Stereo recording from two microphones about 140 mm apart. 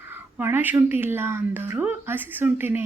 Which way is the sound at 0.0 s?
15° right (ahead or behind).